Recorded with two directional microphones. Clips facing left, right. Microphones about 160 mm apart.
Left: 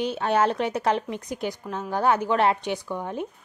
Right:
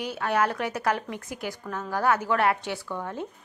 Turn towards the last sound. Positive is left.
turn(degrees=15)  # may be behind; listen again after turning